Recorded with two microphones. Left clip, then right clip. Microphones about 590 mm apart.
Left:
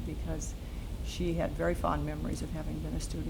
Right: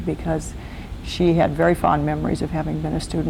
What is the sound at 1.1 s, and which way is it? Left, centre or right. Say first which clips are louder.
Speech: right 16 dB; right.